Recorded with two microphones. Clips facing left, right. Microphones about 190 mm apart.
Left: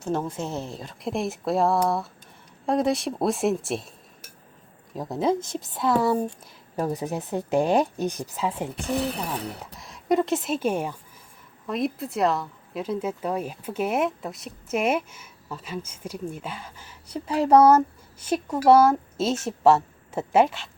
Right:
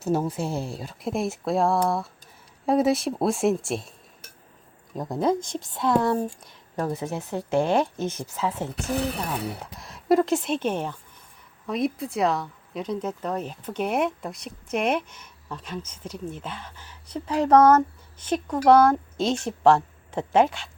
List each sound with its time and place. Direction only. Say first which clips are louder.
0.0 s speech: right 3 dB; 5° right (ahead or behind)
4.9 s speech: even; centre (ahead or behind)
9.7 s a woman's voice: right 2 dB; centre (ahead or behind)